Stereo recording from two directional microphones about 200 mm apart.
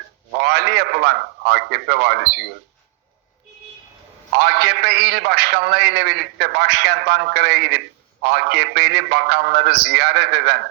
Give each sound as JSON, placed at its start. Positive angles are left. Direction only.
{"t": 0.3, "sound": "a man's voice", "side_deg": -55}
{"t": 4.4, "sound": "a man's voice", "side_deg": -55}